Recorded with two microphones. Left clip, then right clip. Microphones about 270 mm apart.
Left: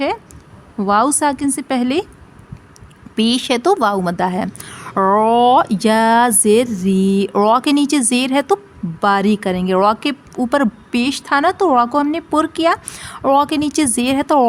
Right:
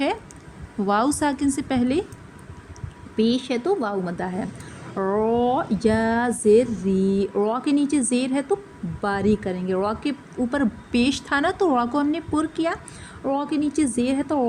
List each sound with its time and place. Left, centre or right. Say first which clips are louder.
0.8 s a woman's voice: left 7 dB; left
3.2 s a woman's voice: left 6 dB; left